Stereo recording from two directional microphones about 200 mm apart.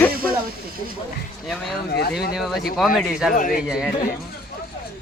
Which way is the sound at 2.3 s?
Centre (ahead or behind).